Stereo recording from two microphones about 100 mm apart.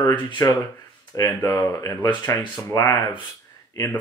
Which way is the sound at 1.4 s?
30° left (ahead or behind).